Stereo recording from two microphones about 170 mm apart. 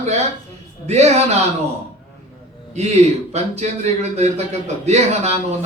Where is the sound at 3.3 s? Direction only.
40° right (ahead or behind).